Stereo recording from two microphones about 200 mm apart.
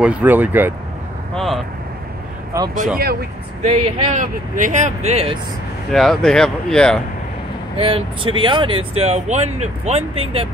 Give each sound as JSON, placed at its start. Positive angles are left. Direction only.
{"t": 0.0, "sound": "speech", "side_deg": -5}
{"t": 1.3, "sound": "vehicle", "side_deg": 0}
{"t": 2.5, "sound": "speech", "side_deg": -15}
{"t": 3.6, "sound": "speech", "side_deg": -30}
{"t": 5.9, "sound": "speech", "side_deg": 0}
{"t": 7.7, "sound": "speech", "side_deg": -25}